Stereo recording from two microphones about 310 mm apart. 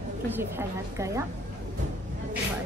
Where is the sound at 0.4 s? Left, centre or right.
Centre.